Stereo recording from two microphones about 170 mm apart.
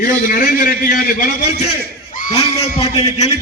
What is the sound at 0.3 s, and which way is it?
A man's voice, 55° left (ahead or behind).